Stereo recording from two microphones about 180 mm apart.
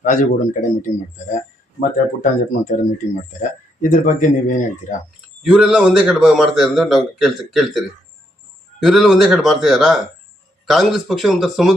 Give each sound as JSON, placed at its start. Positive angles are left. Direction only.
{"t": 0.0, "sound": "a man's voice", "side_deg": 45}
{"t": 5.4, "sound": "a man's voice", "side_deg": -5}